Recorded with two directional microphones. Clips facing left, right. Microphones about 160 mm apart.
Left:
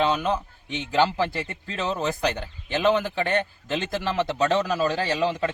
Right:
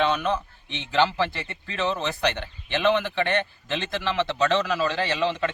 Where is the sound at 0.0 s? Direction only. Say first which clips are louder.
Even; 35° left (ahead or behind).